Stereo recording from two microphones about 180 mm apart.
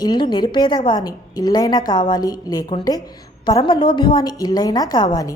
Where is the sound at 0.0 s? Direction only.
25° left (ahead or behind).